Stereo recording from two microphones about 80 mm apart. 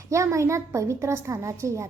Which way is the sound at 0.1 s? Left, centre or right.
Right.